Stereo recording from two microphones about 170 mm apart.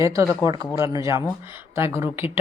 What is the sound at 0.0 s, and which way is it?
A woman's voice, 20° right (ahead or behind).